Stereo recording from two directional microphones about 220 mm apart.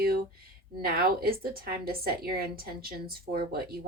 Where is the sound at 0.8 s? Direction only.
45° right (ahead or behind).